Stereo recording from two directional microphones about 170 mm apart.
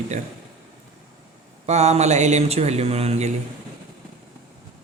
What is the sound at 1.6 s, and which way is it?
A man's voice, 40° right (ahead or behind).